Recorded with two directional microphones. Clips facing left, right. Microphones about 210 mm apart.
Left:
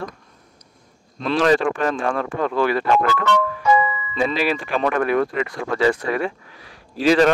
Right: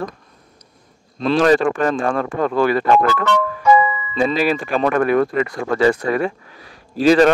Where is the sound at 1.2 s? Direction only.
40° right (ahead or behind).